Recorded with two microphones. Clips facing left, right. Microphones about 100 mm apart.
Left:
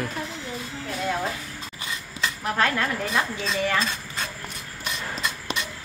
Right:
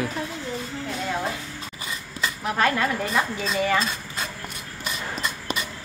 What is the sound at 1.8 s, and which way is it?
Speech, centre (ahead or behind).